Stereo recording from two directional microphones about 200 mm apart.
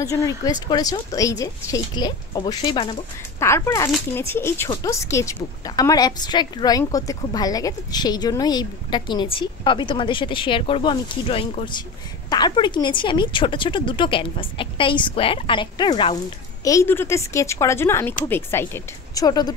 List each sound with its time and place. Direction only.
0.0 s a woman's voice: 15° left (ahead or behind)
3.3 s a woman's voice: 15° left (ahead or behind)